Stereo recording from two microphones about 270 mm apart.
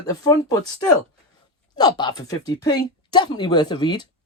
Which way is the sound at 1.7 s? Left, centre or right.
Centre.